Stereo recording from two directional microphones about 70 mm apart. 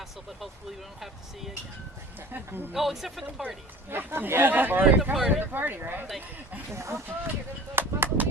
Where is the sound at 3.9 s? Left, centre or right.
Right.